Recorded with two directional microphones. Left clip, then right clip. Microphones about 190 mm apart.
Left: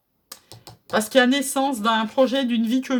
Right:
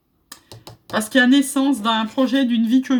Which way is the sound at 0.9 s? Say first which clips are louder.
Right 2 dB; 40° left (ahead or behind).